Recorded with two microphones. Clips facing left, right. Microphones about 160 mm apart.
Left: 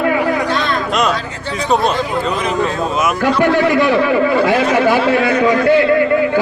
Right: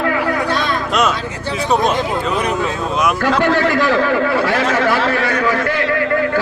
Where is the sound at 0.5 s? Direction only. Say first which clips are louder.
Left 1 dB; 15° right (ahead or behind).